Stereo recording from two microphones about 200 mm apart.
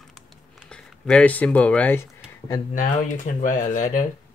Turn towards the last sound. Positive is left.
turn(degrees=40)  # may be behind; listen again after turning